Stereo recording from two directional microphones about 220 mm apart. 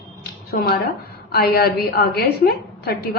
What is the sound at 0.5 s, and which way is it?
A woman's voice, 45° left (ahead or behind).